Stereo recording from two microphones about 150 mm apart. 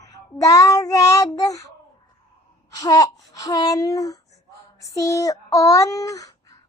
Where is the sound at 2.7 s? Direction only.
25° left (ahead or behind).